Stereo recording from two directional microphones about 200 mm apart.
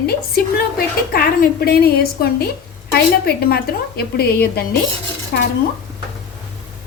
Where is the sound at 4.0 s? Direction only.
50° left (ahead or behind).